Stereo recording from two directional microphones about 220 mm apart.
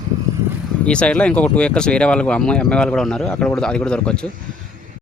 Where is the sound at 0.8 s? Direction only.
5° left (ahead or behind).